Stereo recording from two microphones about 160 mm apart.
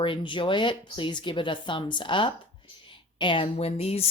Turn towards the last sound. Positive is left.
turn(degrees=40)  # may be behind; listen again after turning